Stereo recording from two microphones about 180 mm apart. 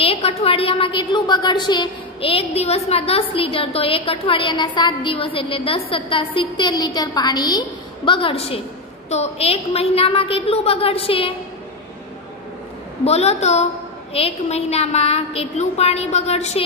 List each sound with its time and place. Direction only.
0.0 s a woman's voice: 35° left (ahead or behind)
13.0 s a woman's voice: 35° left (ahead or behind)